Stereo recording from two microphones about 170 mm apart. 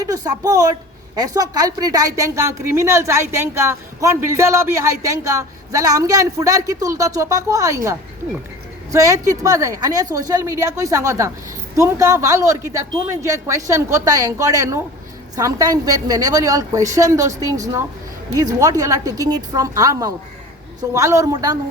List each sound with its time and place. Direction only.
0.0 s a woman's voice: 20° right (ahead or behind)
8.9 s a woman's voice: 20° right (ahead or behind)